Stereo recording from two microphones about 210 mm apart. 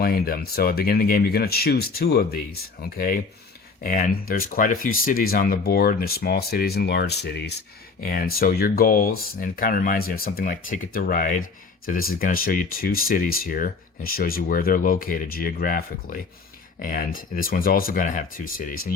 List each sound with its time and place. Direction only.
0.0 s speech: 45° left (ahead or behind)